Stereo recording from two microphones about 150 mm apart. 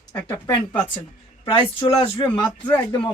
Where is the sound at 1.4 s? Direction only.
35° left (ahead or behind).